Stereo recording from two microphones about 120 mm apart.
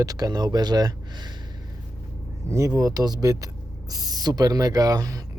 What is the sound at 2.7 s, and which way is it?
Speech, 30° right (ahead or behind).